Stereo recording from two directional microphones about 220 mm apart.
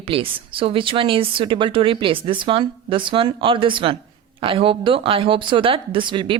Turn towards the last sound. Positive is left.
turn(degrees=-20)  # may be behind; listen again after turning